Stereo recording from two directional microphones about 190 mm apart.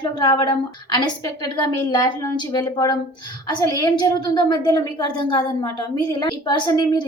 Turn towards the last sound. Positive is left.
turn(degrees=25)  # may be behind; listen again after turning